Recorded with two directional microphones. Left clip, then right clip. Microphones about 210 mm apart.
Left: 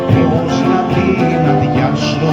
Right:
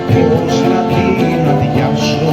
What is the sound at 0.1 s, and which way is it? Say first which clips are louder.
Music: right 5 dB; 5° right (ahead or behind).